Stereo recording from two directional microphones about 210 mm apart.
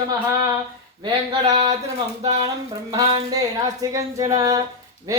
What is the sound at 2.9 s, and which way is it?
Speech, 15° right (ahead or behind).